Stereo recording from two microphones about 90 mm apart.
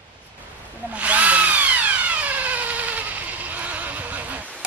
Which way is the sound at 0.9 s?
15° right (ahead or behind).